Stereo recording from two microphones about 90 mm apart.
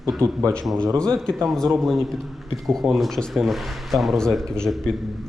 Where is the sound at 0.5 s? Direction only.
5° left (ahead or behind).